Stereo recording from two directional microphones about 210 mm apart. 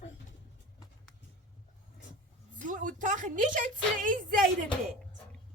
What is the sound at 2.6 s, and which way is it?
A woman's voice, 40° right (ahead or behind).